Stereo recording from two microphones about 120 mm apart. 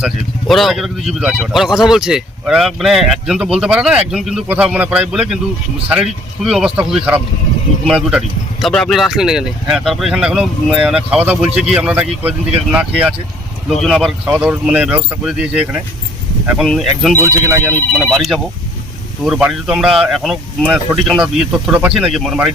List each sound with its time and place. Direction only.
0.0 s speech: centre (ahead or behind)
8.6 s speech: 5° left (ahead or behind)
17.2 s speech: 25° right (ahead or behind)
17.9 s speech: centre (ahead or behind)